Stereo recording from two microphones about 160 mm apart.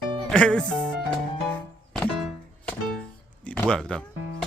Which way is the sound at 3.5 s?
5° left (ahead or behind).